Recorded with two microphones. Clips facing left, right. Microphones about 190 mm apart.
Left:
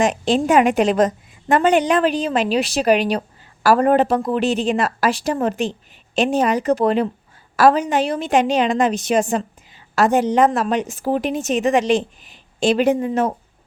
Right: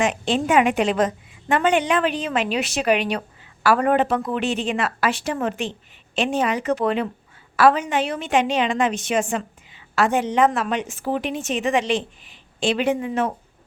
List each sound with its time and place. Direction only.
0.0 s a woman's voice: 40° left (ahead or behind)